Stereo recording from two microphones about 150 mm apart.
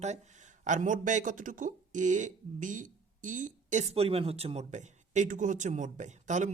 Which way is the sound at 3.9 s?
40° right (ahead or behind).